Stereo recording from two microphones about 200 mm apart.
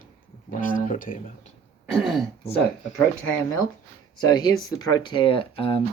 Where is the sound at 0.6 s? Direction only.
40° left (ahead or behind).